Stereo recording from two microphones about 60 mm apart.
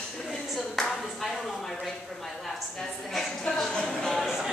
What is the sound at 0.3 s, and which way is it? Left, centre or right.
Clapping, centre.